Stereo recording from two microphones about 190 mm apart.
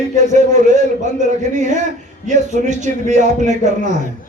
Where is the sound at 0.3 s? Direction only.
40° right (ahead or behind).